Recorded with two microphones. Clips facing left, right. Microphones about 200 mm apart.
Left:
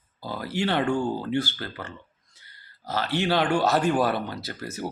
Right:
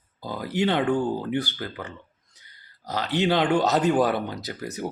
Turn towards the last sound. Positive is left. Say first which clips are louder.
# right 2 dB
turn(degrees=-15)  # may be behind; listen again after turning